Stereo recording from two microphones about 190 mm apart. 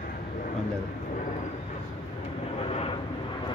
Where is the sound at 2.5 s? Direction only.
30° left (ahead or behind).